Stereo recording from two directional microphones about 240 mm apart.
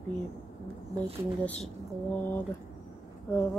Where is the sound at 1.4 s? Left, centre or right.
Centre.